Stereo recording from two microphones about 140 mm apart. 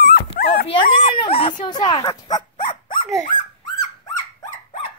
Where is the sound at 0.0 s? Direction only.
90° left.